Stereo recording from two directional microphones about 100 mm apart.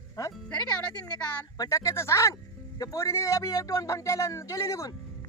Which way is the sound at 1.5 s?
35° left (ahead or behind).